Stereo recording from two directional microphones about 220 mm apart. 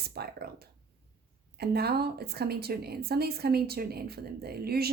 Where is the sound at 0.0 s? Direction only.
45° right (ahead or behind).